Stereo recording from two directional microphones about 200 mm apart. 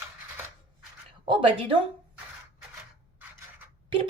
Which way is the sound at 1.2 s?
25° right (ahead or behind).